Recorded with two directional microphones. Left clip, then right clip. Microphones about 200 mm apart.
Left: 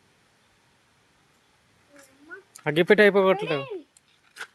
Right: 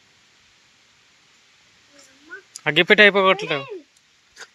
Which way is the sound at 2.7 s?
10° left (ahead or behind).